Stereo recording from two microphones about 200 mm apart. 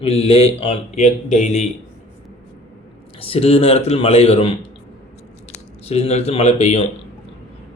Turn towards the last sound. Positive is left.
turn(degrees=35)  # may be behind; listen again after turning